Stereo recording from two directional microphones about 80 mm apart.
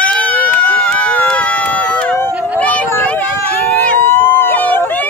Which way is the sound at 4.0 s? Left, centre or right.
Left.